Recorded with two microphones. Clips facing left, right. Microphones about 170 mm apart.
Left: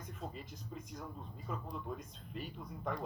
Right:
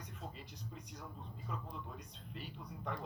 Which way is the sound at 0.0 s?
45° left (ahead or behind).